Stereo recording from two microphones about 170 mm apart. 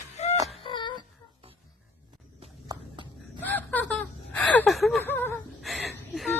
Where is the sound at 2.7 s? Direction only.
25° right (ahead or behind).